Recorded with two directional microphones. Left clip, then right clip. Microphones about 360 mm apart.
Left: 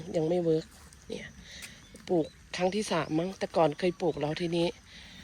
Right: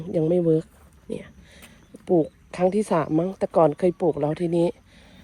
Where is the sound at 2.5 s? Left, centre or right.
Centre.